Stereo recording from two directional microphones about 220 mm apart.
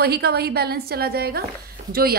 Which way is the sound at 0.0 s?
45° right (ahead or behind).